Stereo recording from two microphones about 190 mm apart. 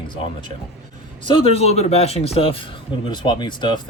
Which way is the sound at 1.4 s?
35° left (ahead or behind).